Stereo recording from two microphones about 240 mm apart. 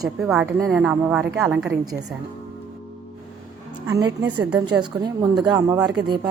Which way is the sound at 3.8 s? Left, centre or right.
Centre.